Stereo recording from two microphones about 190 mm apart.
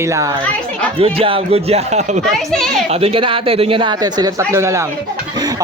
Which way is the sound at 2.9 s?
30° right (ahead or behind).